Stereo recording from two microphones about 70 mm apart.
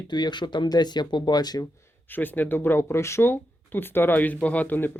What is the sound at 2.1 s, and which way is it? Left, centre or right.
Speech, left.